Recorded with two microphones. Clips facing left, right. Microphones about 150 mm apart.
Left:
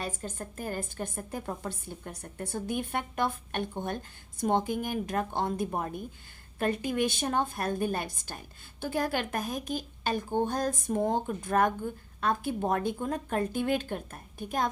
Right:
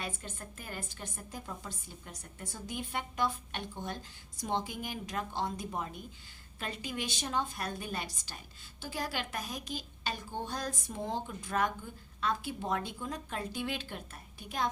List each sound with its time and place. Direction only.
0.0 s a woman's voice: 40° left (ahead or behind)